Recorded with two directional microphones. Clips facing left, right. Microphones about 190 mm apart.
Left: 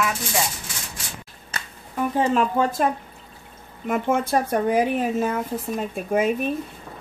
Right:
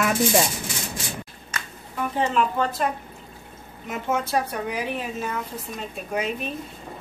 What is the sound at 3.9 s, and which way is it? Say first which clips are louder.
Speech: left 4 dB; 50° left (ahead or behind).